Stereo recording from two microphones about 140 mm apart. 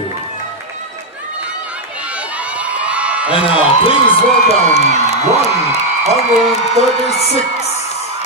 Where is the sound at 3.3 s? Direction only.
40° left (ahead or behind).